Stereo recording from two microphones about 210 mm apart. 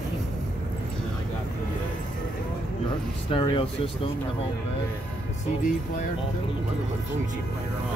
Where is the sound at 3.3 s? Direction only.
25° left (ahead or behind).